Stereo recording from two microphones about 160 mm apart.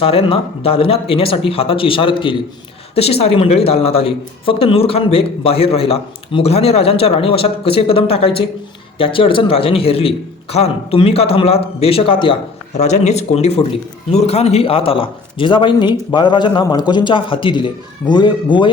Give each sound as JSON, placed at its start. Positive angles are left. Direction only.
{"t": 0.0, "sound": "a man's voice", "side_deg": 35}